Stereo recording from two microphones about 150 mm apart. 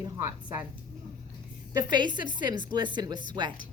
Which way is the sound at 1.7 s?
25° right (ahead or behind).